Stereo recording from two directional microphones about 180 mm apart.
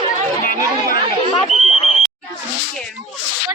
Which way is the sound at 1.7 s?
35° left (ahead or behind).